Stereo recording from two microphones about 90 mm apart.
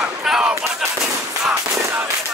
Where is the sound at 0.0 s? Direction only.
5° right (ahead or behind).